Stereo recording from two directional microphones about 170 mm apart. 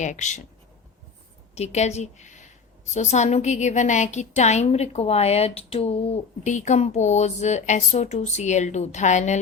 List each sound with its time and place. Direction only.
0.0 s a woman's voice: 45° left (ahead or behind)
1.5 s a woman's voice: 40° left (ahead or behind)